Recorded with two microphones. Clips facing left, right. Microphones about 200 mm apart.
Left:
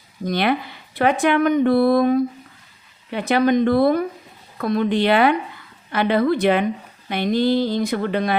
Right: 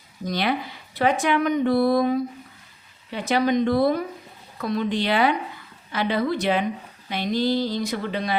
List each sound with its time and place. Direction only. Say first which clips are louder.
0.3 s speech: left 4 dB; 60° left (ahead or behind)